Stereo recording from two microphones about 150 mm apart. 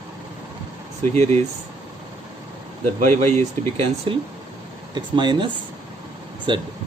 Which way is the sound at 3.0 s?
50° right (ahead or behind).